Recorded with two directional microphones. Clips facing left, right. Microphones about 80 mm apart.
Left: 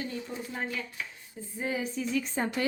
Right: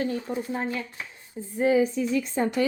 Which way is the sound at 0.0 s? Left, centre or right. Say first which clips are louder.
Right 8 dB; right.